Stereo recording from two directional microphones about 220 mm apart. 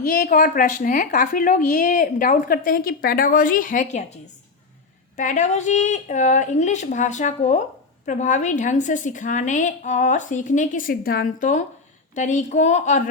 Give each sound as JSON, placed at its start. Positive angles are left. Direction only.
{"t": 0.0, "sound": "a woman's voice", "side_deg": 35}
{"t": 5.1, "sound": "a woman's voice", "side_deg": 35}